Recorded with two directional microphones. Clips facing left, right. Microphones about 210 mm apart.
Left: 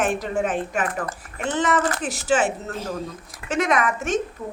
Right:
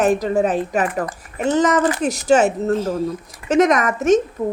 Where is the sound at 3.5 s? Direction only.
40° right (ahead or behind).